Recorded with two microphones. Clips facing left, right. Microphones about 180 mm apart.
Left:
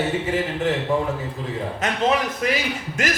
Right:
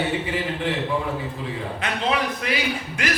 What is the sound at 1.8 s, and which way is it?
A man's voice, 45° left (ahead or behind).